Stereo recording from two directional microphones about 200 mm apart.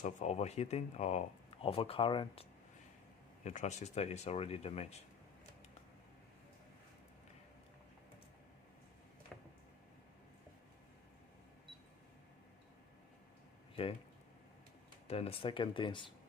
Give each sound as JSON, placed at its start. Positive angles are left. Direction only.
{"t": 0.0, "sound": "speech", "side_deg": 35}
{"t": 15.0, "sound": "speech", "side_deg": 30}